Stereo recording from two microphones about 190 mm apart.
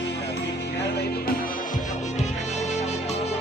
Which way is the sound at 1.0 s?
55° left (ahead or behind).